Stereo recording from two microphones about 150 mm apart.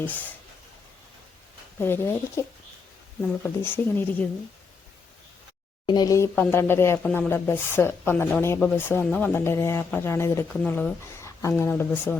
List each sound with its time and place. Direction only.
0.0 s speech: 10° left (ahead or behind)
1.8 s speech: 15° left (ahead or behind)
5.8 s speech: 30° left (ahead or behind)
7.0 s speech: 5° left (ahead or behind)